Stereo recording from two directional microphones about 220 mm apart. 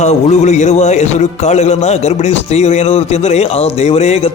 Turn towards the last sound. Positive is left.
turn(degrees=25)  # may be behind; listen again after turning